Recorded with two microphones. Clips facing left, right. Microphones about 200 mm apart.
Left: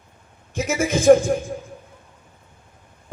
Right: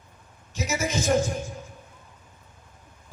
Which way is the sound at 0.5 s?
50° left (ahead or behind).